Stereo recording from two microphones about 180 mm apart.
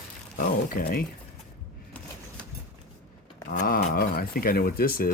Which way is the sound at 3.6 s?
55° left (ahead or behind).